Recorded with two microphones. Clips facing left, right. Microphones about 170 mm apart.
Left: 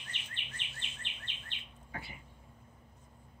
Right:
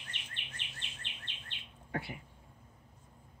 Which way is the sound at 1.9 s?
65° right (ahead or behind).